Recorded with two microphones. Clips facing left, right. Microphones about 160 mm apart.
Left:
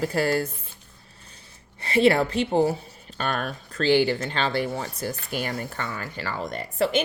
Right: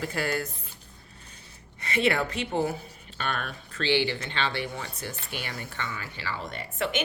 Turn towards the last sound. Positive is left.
turn(degrees=35)  # may be behind; listen again after turning